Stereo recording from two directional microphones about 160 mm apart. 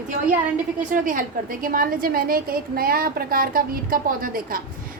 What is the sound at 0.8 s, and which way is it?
A woman's voice, 55° right (ahead or behind).